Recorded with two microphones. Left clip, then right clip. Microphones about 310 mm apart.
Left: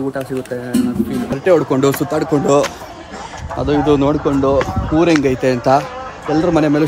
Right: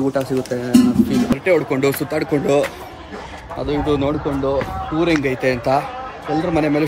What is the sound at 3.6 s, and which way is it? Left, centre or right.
Speech, left.